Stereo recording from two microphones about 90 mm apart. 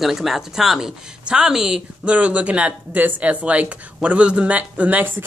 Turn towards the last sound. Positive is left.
turn(degrees=-20)  # may be behind; listen again after turning